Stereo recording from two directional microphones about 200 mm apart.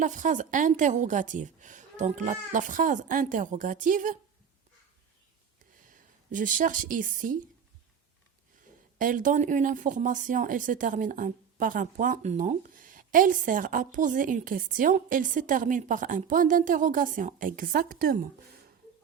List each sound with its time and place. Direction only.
0.0 s speech: 40° right (ahead or behind)
5.9 s speech: 40° right (ahead or behind)
9.0 s speech: 40° right (ahead or behind)